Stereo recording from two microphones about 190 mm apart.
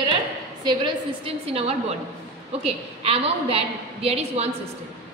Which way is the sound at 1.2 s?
30° right (ahead or behind).